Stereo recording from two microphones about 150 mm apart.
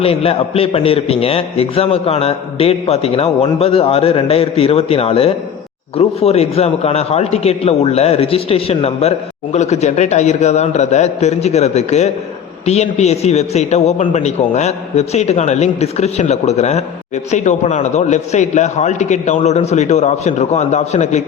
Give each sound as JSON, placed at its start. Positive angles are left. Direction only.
{"t": 0.0, "sound": "a man's voice", "side_deg": 40}